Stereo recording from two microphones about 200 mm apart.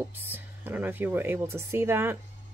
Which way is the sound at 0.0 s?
10° right (ahead or behind).